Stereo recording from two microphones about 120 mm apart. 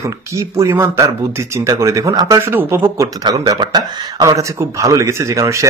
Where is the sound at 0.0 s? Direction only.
25° right (ahead or behind).